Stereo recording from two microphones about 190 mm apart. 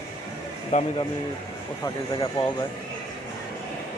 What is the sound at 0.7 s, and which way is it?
Speech, 35° left (ahead or behind).